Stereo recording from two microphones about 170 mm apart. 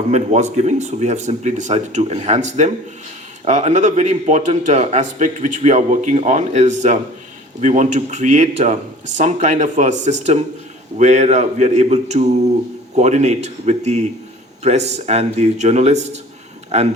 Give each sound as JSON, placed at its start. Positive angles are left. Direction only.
{"t": 0.1, "sound": "speech", "side_deg": -40}